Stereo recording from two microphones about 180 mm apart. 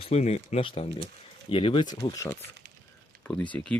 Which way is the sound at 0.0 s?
35° left (ahead or behind).